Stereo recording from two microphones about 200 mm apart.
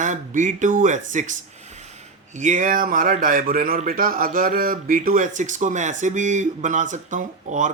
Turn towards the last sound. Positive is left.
turn(degrees=-40)  # may be behind; listen again after turning